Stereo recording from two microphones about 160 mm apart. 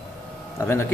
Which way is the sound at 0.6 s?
15° left (ahead or behind).